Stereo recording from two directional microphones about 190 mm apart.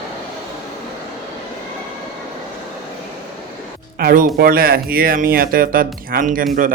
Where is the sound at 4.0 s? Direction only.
50° right (ahead or behind).